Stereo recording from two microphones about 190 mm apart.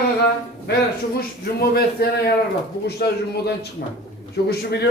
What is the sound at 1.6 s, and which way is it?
Speech, 55° left (ahead or behind).